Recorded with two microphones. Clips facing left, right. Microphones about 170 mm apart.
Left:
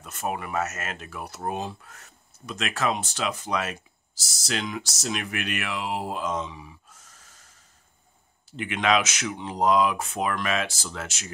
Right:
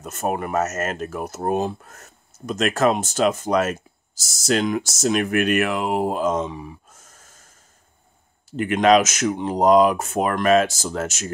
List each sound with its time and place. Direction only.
0.0 s speech: 45° right (ahead or behind)